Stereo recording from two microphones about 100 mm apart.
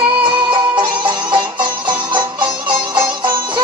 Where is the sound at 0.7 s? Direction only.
55° right (ahead or behind).